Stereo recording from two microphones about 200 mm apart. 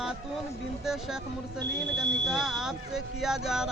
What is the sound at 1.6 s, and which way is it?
Speech, 60° right (ahead or behind).